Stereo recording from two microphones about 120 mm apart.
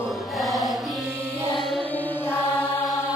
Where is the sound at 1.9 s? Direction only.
20° left (ahead or behind).